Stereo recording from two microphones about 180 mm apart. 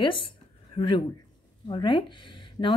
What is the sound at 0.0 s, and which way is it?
Speech, 30° left (ahead or behind).